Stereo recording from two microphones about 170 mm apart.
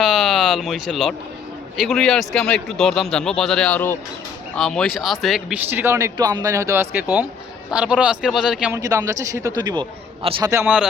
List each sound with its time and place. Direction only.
0.0 s a sound: centre (ahead or behind)
1.8 s a man's voice: centre (ahead or behind)
5.7 s a man's voice: 15° right (ahead or behind)
8.7 s a man's voice: 20° right (ahead or behind)